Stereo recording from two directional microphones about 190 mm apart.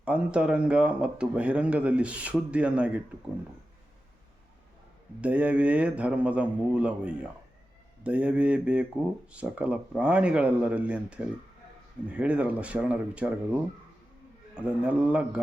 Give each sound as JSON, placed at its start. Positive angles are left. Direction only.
{"t": 0.0, "sound": "speech", "side_deg": -5}
{"t": 5.2, "sound": "speech", "side_deg": -5}